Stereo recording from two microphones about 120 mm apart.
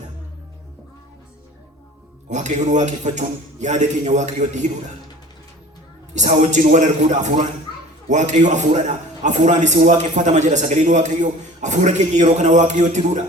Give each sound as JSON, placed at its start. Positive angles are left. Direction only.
{"t": 2.3, "sound": "a man's voice", "side_deg": -90}
{"t": 6.1, "sound": "a man's voice", "side_deg": -85}